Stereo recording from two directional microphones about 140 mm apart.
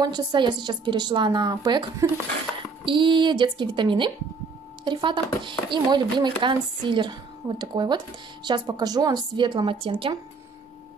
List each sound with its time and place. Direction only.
0.0 s speech: 30° right (ahead or behind)